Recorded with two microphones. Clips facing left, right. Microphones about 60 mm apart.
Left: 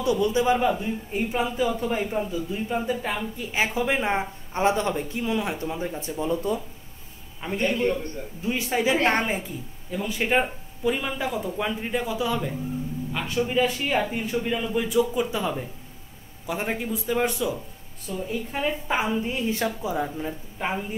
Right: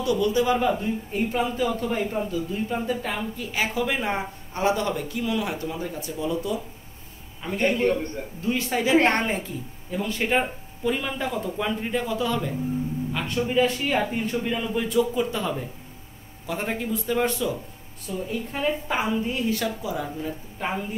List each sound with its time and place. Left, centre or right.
0.0 s speech: left
0.7 s speech: centre
3.5 s speech: left
7.4 s a man's voice: left
19.5 s speech: left
20.5 s speech: centre